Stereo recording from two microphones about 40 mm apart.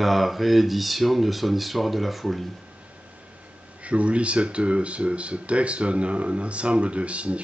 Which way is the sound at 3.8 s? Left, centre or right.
Right.